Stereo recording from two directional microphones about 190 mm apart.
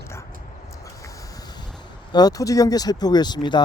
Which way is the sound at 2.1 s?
20° left (ahead or behind).